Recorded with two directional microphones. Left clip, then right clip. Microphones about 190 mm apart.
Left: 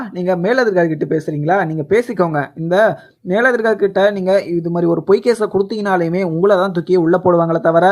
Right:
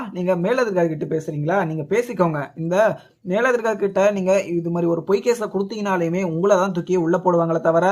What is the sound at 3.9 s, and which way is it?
Speech, 25° left (ahead or behind).